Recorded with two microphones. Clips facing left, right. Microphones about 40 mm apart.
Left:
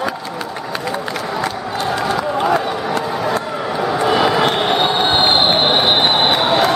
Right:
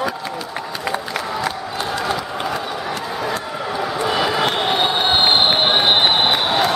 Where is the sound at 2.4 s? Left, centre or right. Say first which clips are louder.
Left 7 dB; centre.